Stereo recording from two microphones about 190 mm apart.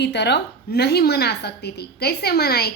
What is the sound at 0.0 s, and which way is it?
A woman's voice, 65° left (ahead or behind).